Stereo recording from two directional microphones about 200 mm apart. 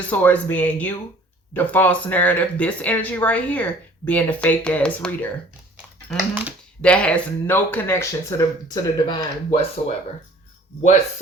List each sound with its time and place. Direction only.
0.1 s speech: 5° left (ahead or behind)
6.1 s speech: 5° right (ahead or behind)
6.8 s speech: 5° left (ahead or behind); by 9.8 s 25° left (ahead or behind)